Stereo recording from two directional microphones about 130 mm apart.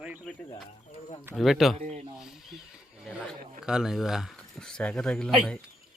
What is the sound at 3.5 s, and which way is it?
Speech, 5° right (ahead or behind).